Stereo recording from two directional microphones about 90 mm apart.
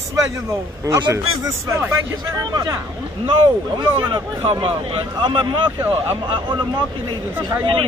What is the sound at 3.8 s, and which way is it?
Speech, 60° right (ahead or behind).